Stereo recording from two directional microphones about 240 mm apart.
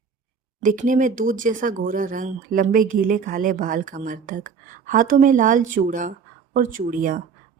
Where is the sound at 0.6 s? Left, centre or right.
Right.